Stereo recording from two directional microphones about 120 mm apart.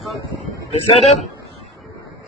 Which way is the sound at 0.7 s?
60° left (ahead or behind).